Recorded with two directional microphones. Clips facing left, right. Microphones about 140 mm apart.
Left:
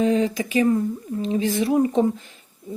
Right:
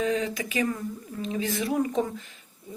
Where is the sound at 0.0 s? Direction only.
30° left (ahead or behind).